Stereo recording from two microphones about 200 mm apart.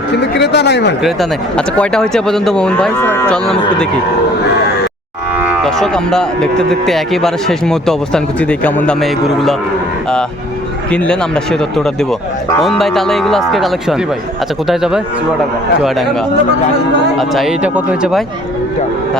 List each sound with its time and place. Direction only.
0.2 s speech: 60° left (ahead or behind)
1.0 s speech: 5° left (ahead or behind)
5.6 s speech: centre (ahead or behind)
10.9 s speech: 5° left (ahead or behind)
17.2 s speech: centre (ahead or behind)